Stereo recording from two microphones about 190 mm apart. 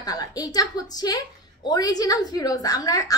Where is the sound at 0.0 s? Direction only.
20° left (ahead or behind).